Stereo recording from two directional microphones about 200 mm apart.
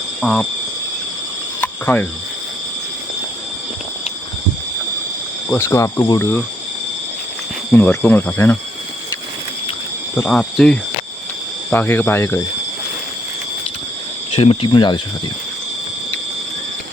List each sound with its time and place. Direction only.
0.2 s cricket: 5° left (ahead or behind)
1.6 s cricket: 10° left (ahead or behind)
5.5 s speech: 15° left (ahead or behind)
7.7 s speech: 10° left (ahead or behind)
10.2 s speech: centre (ahead or behind)
14.3 s speech: 30° left (ahead or behind)